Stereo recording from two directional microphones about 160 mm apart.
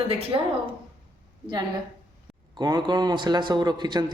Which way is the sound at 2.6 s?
30° right (ahead or behind).